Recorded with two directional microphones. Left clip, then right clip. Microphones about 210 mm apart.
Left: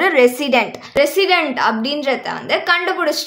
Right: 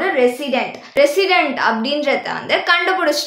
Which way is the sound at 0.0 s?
35° left (ahead or behind).